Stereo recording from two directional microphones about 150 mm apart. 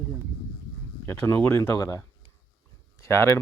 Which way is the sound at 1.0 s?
15° left (ahead or behind).